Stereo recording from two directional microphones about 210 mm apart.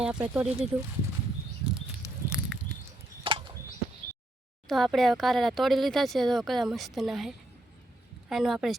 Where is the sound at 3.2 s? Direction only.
25° right (ahead or behind).